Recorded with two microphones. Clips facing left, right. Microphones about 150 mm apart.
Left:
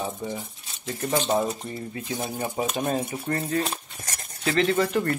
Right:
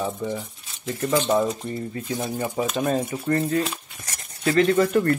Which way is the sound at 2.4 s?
50° right (ahead or behind).